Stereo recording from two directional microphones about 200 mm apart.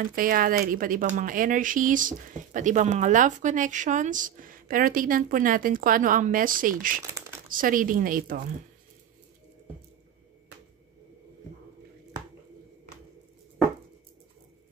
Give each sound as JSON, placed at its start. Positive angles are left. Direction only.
{"t": 0.0, "sound": "speech", "side_deg": -45}